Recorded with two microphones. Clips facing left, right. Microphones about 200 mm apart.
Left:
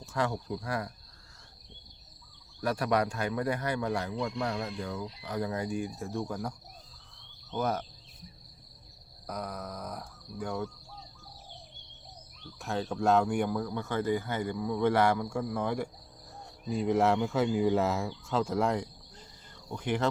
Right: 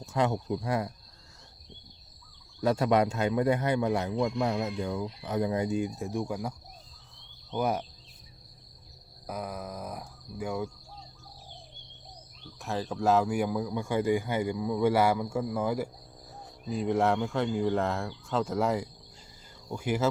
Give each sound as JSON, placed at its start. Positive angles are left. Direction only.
{"t": 0.1, "sound": "a man's voice", "side_deg": -20}
{"t": 2.6, "sound": "a man's voice", "side_deg": -25}
{"t": 7.5, "sound": "speech", "side_deg": -10}
{"t": 9.2, "sound": "speech", "side_deg": -5}
{"t": 12.5, "sound": "speech", "side_deg": 0}